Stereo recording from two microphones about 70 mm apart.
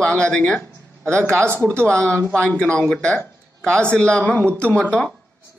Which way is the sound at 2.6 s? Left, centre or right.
Centre.